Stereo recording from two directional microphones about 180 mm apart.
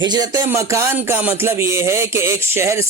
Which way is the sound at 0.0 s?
25° right (ahead or behind).